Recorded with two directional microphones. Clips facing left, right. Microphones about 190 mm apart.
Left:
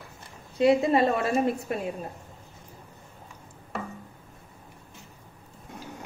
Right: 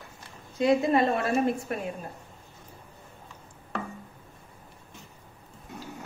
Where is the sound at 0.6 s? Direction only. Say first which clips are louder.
Left 2 dB; 30° left (ahead or behind).